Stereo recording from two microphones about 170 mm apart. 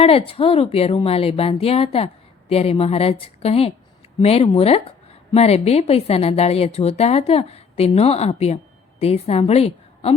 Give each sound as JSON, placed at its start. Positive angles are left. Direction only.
{"t": 0.0, "sound": "a woman's voice", "side_deg": 35}